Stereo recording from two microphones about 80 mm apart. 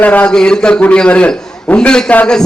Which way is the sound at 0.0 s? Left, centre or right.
Centre.